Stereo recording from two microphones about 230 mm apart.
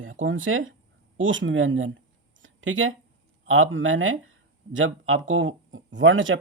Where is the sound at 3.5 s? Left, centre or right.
Right.